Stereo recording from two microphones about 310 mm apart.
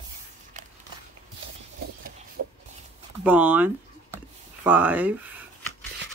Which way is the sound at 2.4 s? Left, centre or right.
Right.